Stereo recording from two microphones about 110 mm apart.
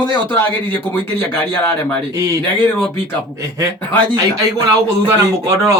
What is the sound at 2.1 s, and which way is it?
Speech, 30° right (ahead or behind).